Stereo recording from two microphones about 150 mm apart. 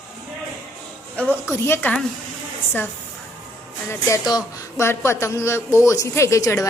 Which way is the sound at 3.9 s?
20° left (ahead or behind).